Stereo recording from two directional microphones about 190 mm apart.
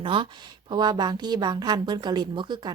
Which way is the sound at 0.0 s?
25° right (ahead or behind).